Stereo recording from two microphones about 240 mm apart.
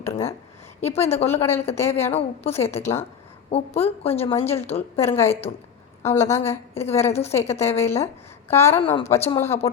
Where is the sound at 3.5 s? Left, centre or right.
Left.